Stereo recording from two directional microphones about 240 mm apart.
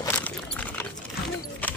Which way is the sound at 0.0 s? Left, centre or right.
Centre.